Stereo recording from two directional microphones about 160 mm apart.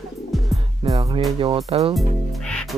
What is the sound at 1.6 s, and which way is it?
Speech, 40° right (ahead or behind).